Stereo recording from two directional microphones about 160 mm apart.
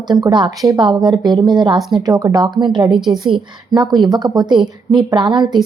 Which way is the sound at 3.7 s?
25° right (ahead or behind).